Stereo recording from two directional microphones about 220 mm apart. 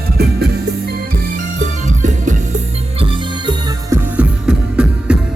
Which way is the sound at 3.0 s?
20° right (ahead or behind).